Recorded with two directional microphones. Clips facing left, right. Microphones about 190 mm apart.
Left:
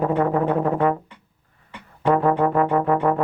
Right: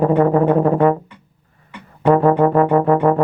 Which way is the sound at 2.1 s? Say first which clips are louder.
Right 5 dB; 40° right (ahead or behind).